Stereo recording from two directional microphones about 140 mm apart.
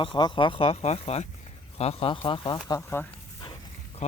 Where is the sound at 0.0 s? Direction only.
35° left (ahead or behind).